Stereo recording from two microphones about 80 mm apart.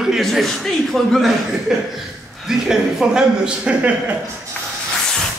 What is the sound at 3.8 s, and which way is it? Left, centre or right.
Speech, right.